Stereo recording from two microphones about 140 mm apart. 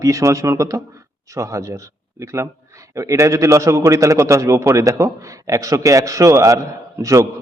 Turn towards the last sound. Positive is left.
turn(degrees=-20)  # may be behind; listen again after turning